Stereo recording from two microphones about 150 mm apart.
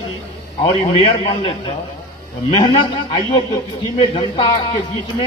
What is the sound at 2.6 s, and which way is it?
A man's voice, 35° left (ahead or behind).